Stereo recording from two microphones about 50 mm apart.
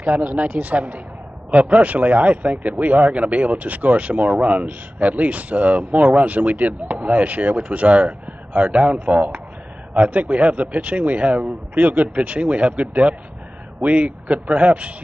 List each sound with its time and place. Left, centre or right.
0.0 s speech: right